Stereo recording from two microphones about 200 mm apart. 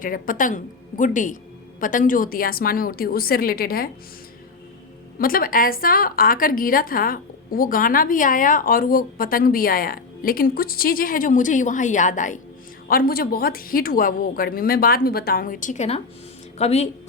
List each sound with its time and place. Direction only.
0.0 s a woman's voice: 45° left (ahead or behind)
5.2 s a woman's voice: 45° left (ahead or behind)